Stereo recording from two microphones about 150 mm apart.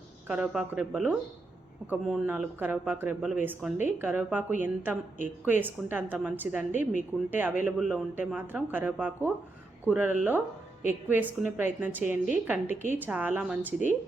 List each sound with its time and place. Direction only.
0.3 s speech: 5° right (ahead or behind)